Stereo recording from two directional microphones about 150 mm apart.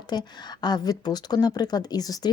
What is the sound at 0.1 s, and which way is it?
Speech, 30° left (ahead or behind).